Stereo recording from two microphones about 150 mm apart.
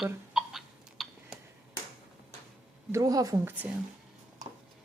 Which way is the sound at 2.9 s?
20° right (ahead or behind).